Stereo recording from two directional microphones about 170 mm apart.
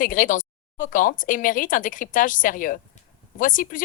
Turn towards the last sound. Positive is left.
turn(degrees=50)  # may be behind; listen again after turning